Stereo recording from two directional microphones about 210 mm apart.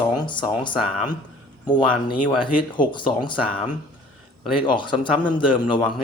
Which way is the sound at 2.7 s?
20° left (ahead or behind).